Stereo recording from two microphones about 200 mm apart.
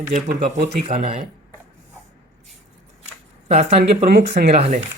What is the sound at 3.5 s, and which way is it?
Speech, 30° right (ahead or behind).